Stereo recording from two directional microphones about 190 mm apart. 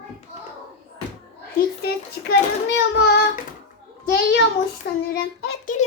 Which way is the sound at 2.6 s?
60° left (ahead or behind).